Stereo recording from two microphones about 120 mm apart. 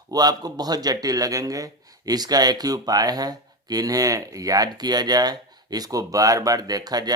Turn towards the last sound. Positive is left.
turn(degrees=-35)  # may be behind; listen again after turning